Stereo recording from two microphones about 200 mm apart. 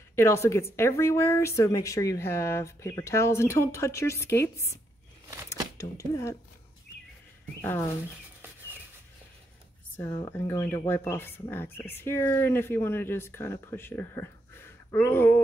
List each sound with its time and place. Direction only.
0.1 s speech: 15° left (ahead or behind)
5.8 s speech: 15° left (ahead or behind)
9.9 s speech: 15° left (ahead or behind)